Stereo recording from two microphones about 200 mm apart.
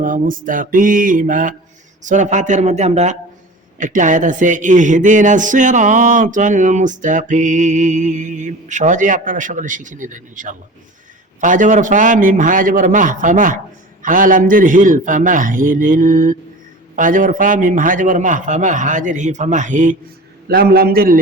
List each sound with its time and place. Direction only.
0.0 s mantra: 40° right (ahead or behind)
2.0 s a man's voice: 40° right (ahead or behind)
20.5 s mantra: 50° right (ahead or behind)